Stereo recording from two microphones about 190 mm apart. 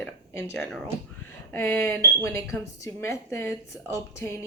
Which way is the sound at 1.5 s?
15° left (ahead or behind).